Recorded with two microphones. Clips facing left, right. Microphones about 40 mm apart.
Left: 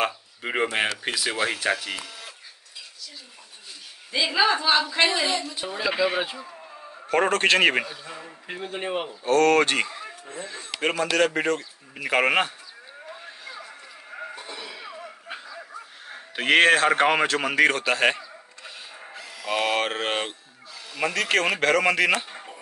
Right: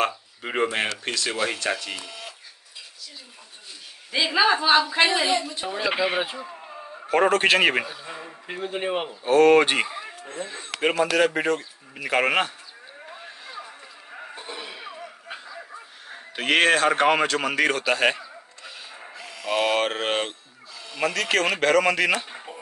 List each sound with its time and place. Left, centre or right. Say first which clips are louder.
0.0 s speech: right 1 dB; centre
4.1 s speech: right 1 dB; right
5.2 s speech: right 2 dB; centre
6.1 s a sound: right 1 dB; centre
7.1 s speech: right 2 dB; centre
8.1 s speech: right 1 dB; centre
10.8 s speech: right 2 dB; centre
14.3 s a sound: right 1 dB; right
16.1 s speech: left 2 dB; centre
22.3 s a sound: right 1 dB; centre